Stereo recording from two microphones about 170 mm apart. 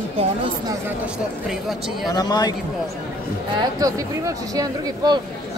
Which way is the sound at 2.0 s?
25° left (ahead or behind).